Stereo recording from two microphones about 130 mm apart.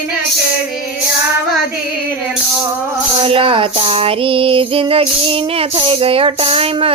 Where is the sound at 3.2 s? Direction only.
45° right (ahead or behind).